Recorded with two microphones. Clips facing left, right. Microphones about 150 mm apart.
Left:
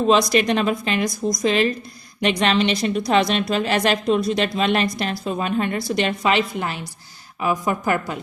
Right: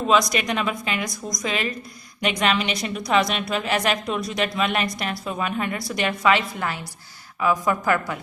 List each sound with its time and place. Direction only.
0.1 s a woman's voice: 30° left (ahead or behind)